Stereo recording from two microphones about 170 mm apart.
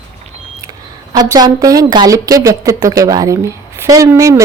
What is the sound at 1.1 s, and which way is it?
A woman's voice, 20° right (ahead or behind).